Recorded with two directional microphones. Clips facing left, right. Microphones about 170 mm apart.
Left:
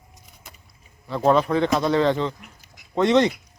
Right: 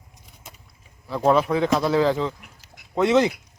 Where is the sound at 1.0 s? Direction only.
Centre (ahead or behind).